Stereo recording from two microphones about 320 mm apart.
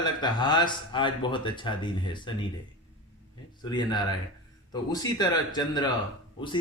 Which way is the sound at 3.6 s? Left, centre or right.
Centre.